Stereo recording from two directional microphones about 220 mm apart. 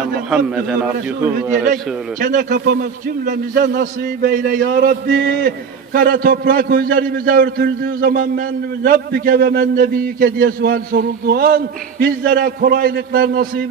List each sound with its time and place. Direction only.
0.6 s a man's voice: 5° right (ahead or behind)
1.7 s a man's voice: 35° right (ahead or behind)